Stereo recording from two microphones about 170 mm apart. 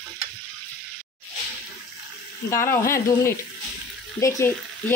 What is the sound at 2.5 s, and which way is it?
Frying, 15° left (ahead or behind).